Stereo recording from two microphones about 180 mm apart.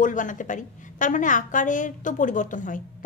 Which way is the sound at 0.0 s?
45° left (ahead or behind).